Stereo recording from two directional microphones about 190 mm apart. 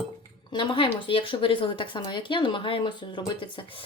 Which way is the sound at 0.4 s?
25° left (ahead or behind).